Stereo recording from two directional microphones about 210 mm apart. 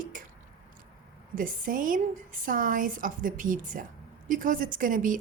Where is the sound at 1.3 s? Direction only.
40° right (ahead or behind).